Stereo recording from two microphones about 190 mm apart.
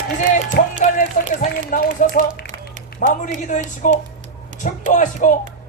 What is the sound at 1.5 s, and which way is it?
Speech, 50° left (ahead or behind).